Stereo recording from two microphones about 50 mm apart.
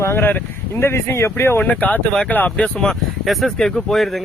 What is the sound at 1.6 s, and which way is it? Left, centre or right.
Speech, left.